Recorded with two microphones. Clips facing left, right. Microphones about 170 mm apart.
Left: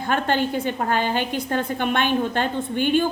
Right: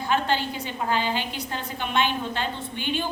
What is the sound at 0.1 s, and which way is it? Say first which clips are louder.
A woman's voice: left 4 dB; 50° left (ahead or behind).